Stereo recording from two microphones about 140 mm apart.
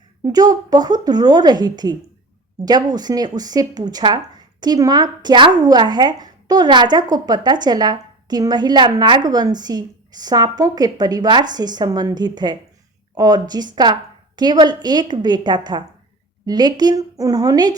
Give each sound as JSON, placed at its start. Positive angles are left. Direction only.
{"t": 0.3, "sound": "a woman's voice", "side_deg": -25}